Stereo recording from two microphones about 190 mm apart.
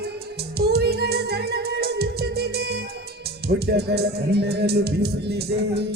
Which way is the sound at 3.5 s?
60° right (ahead or behind).